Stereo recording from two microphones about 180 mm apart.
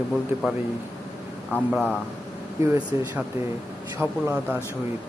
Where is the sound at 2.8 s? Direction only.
15° right (ahead or behind).